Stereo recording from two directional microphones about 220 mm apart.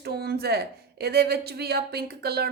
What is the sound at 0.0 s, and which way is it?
Speech, 45° right (ahead or behind).